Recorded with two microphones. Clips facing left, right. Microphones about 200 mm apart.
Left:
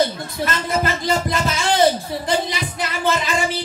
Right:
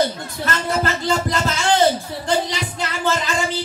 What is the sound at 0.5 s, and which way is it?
Speech, 15° left (ahead or behind).